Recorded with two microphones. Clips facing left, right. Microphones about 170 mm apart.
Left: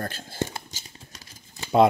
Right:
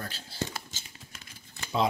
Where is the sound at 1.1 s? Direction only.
40° left (ahead or behind).